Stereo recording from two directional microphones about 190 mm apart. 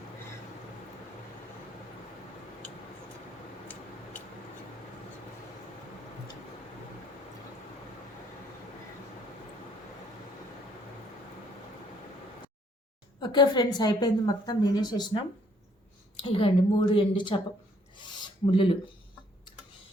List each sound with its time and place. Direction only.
13.1 s a woman's voice: 25° left (ahead or behind)
16.2 s a woman's voice: 25° left (ahead or behind)
18.5 s a woman's voice: 30° left (ahead or behind)